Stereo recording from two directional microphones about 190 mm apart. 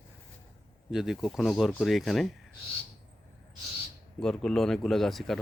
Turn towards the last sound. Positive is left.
turn(degrees=0)  # may be behind; listen again after turning